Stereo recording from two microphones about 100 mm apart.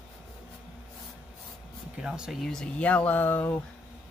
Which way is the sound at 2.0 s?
5° right (ahead or behind).